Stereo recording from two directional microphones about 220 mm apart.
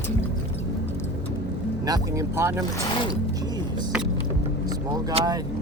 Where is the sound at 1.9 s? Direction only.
15° right (ahead or behind).